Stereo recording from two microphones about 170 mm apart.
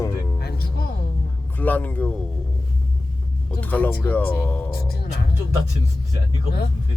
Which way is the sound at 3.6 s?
10° left (ahead or behind).